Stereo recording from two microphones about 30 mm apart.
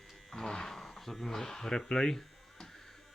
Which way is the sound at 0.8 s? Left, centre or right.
Centre.